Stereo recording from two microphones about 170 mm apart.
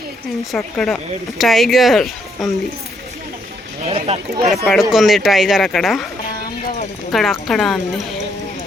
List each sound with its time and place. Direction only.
0.5 s speech: 5° left (ahead or behind)
3.8 s speech: 35° right (ahead or behind)
4.4 s speech: centre (ahead or behind)
7.1 s speech: centre (ahead or behind)